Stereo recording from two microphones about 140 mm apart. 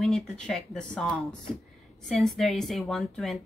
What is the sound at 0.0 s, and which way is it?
A woman's voice, 5° left (ahead or behind).